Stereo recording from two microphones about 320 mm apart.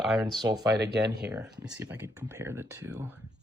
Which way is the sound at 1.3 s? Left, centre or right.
Centre.